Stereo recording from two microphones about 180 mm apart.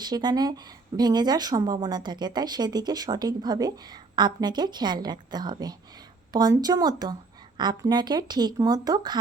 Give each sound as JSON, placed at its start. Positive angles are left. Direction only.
{"t": 0.0, "sound": "a woman's voice", "side_deg": -25}